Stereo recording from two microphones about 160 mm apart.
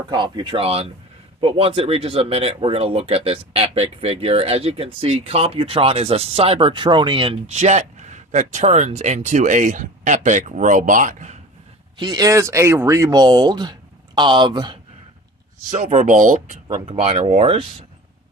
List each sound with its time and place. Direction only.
0.1 s speech: 30° right (ahead or behind); by 11.3 s 50° right (ahead or behind)
11.9 s speech: 25° right (ahead or behind)
15.7 s speech: 55° right (ahead or behind)
16.8 s speech: 40° right (ahead or behind)